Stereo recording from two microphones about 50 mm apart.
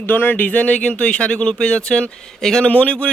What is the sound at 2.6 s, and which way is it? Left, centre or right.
Speech, left.